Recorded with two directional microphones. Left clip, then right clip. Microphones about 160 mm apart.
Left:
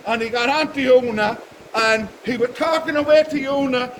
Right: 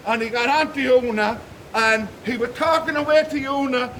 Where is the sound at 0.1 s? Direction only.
30° right (ahead or behind).